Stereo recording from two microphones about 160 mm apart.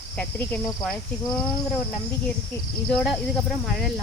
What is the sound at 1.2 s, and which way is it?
Speech, 20° left (ahead or behind).